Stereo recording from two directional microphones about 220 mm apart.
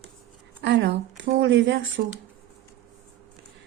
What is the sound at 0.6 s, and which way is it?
Speech, 55° right (ahead or behind).